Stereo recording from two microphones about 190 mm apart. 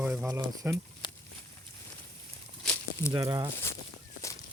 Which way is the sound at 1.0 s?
25° left (ahead or behind).